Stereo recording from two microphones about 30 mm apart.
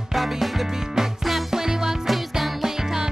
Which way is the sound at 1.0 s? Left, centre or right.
Centre.